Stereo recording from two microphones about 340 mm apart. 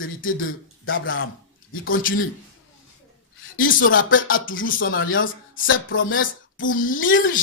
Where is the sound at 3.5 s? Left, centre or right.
Left.